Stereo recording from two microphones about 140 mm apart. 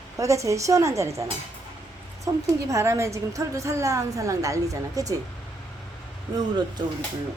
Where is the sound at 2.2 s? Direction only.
20° right (ahead or behind).